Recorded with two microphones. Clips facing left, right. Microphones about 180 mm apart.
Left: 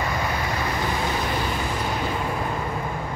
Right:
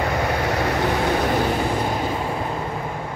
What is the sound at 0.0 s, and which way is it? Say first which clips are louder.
Vehicle: right 5 dB; 65° right (ahead or behind).